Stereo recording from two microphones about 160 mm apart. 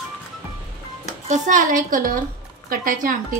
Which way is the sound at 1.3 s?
55° right (ahead or behind).